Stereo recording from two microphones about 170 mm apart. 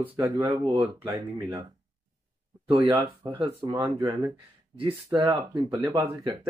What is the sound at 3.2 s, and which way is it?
Speech, 20° right (ahead or behind).